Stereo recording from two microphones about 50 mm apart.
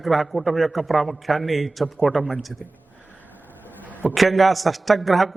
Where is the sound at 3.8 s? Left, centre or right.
Right.